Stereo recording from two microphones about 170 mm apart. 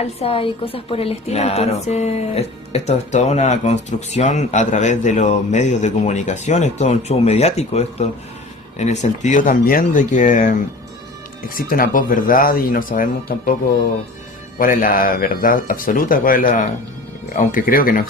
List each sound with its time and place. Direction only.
0.0 s a woman's voice: 35° left (ahead or behind); by 13.6 s 55° left (ahead or behind)
14.6 s speech: 55° left (ahead or behind)